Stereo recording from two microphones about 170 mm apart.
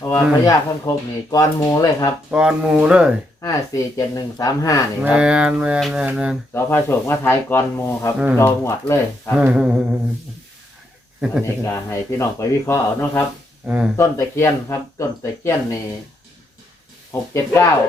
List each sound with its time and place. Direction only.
0.0 s speech: 20° left (ahead or behind)
2.3 s speech: 5° right (ahead or behind)
3.4 s speech: 20° left (ahead or behind)
5.0 s speech: 5° right (ahead or behind)
6.5 s speech: 15° left (ahead or behind)
9.3 s speech: 5° right (ahead or behind)
11.6 s speech: 15° left (ahead or behind)
13.7 s speech: 5° right (ahead or behind)
13.9 s speech: 15° left (ahead or behind)
17.1 s speech: 15° left (ahead or behind)